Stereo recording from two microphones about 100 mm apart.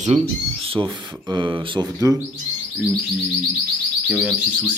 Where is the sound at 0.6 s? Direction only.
65° right (ahead or behind).